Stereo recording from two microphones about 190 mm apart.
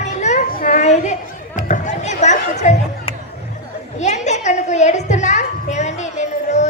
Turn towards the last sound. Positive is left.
turn(degrees=40)  # may be behind; listen again after turning